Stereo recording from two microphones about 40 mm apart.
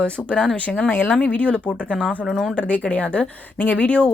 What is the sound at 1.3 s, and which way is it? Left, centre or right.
Speech, left.